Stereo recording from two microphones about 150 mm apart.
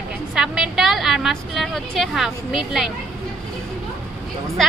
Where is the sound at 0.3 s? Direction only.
5° right (ahead or behind).